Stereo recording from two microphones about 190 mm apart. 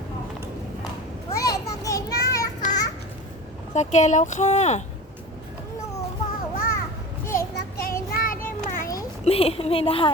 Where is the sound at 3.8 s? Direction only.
40° left (ahead or behind).